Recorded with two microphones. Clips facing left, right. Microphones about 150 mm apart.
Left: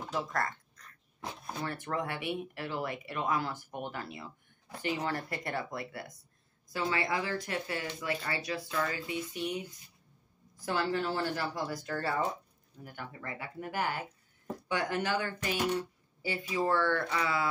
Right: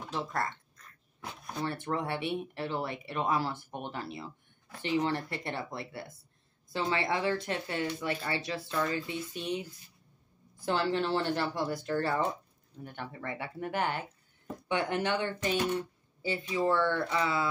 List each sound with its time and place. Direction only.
0.1 s speech: 25° right (ahead or behind)
1.6 s speech: 30° right (ahead or behind)
10.6 s speech: 25° right (ahead or behind)
12.8 s speech: 25° right (ahead or behind)